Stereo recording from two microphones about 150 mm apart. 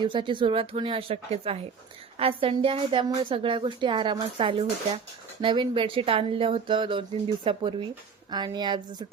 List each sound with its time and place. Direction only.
0.0 s a woman's voice: 30° right (ahead or behind)